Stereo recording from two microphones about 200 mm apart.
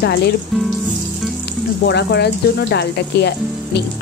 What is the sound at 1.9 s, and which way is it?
Speech, 55° left (ahead or behind).